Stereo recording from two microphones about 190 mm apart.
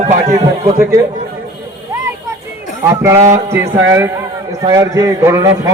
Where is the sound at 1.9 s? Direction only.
15° right (ahead or behind).